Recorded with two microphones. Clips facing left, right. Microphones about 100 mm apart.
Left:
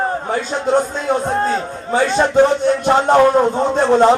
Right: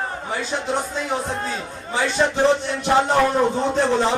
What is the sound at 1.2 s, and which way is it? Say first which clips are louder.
Crowd: left 9 dB; 50° left (ahead or behind).